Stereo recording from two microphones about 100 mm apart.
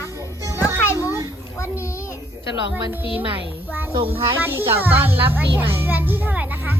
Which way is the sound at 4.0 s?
70° right (ahead or behind).